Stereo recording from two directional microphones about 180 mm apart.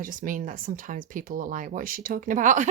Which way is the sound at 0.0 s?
50° right (ahead or behind).